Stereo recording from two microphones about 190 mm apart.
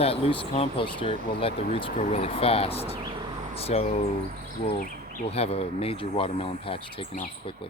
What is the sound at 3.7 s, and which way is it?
Speech, 35° left (ahead or behind).